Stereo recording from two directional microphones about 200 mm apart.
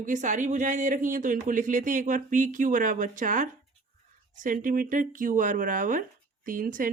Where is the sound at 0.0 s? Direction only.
40° right (ahead or behind).